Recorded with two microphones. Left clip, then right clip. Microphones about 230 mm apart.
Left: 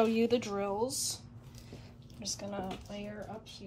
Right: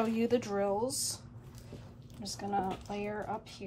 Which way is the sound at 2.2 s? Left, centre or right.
Left.